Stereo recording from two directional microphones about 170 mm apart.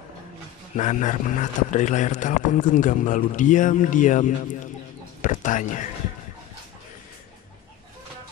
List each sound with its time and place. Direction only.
0.7 s a man's voice: 45° left (ahead or behind)